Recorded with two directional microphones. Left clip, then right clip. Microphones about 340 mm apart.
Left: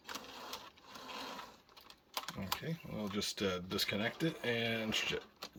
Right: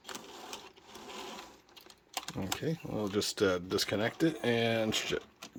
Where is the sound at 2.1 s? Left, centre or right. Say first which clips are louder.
Right 3 dB; centre.